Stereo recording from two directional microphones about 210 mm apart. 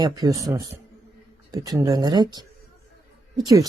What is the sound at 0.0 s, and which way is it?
Speech, 15° right (ahead or behind).